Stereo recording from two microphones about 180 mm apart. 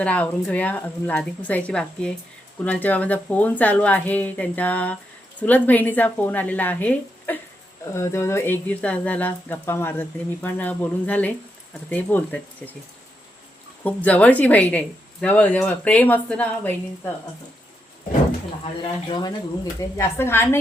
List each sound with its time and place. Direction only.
0.0 s speech: 5° left (ahead or behind)
13.8 s speech: 10° left (ahead or behind)
18.6 s speech: 25° left (ahead or behind)